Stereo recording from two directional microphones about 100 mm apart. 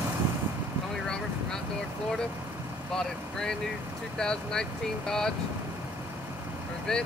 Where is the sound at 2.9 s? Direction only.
5° left (ahead or behind).